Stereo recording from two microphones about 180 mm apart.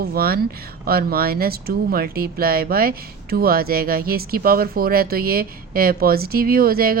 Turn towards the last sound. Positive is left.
turn(degrees=-55)  # may be behind; listen again after turning